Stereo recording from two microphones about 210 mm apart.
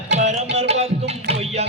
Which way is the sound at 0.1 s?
35° right (ahead or behind).